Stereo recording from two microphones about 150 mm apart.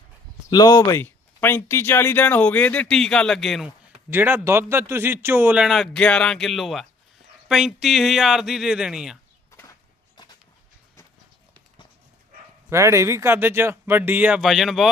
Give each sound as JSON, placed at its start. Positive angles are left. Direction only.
{"t": 0.5, "sound": "speech", "side_deg": 30}
{"t": 0.9, "sound": "speech", "side_deg": 15}
{"t": 4.1, "sound": "a man's voice", "side_deg": -15}
{"t": 9.5, "sound": "a sound", "side_deg": 20}
{"t": 12.7, "sound": "a man's voice", "side_deg": -20}